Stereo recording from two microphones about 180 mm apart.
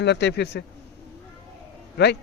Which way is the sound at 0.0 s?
70° left (ahead or behind).